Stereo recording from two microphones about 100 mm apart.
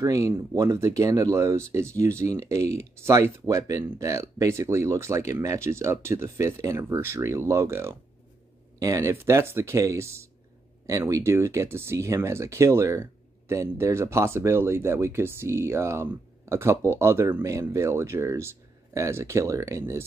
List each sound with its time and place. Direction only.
0.0 s speech: 30° right (ahead or behind)